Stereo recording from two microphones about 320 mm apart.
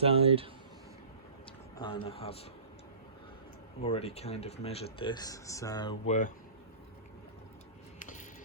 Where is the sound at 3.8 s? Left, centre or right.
Centre.